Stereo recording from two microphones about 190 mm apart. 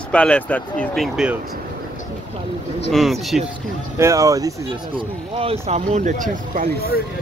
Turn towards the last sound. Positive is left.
turn(degrees=-45)  # may be behind; listen again after turning